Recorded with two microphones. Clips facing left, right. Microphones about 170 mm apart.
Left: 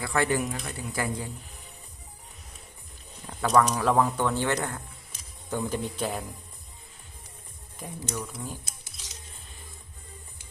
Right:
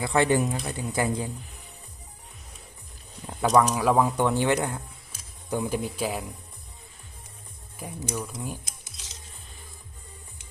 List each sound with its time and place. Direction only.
0.0 s speech: 20° right (ahead or behind)
3.2 s speech: 10° right (ahead or behind)
7.8 s speech: 10° right (ahead or behind)